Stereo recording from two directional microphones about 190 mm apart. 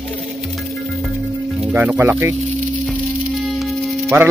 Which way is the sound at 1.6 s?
10° right (ahead or behind).